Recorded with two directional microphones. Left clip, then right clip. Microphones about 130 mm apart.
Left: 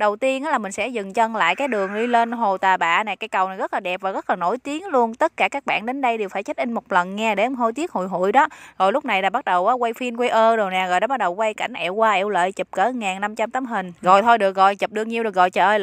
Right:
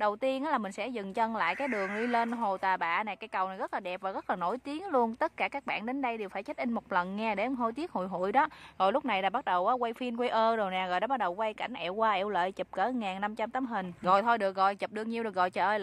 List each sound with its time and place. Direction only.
0.0 s a woman's voice: 40° left (ahead or behind)